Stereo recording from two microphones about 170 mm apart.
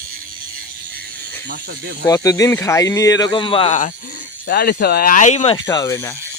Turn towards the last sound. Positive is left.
turn(degrees=20)  # may be behind; listen again after turning